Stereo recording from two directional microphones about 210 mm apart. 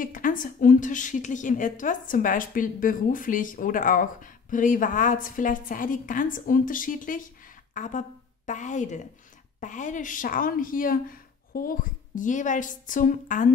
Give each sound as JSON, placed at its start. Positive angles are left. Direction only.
{"t": 0.0, "sound": "a woman's voice", "side_deg": 40}